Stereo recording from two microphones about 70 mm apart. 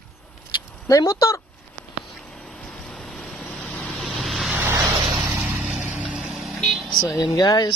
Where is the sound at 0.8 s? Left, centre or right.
Left.